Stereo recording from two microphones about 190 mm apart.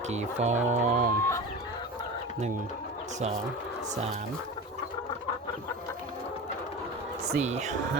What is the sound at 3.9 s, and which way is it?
Speech, 35° right (ahead or behind).